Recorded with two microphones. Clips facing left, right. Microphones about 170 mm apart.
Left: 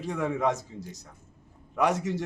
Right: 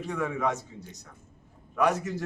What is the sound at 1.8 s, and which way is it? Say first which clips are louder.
Speech: even; 25° left (ahead or behind).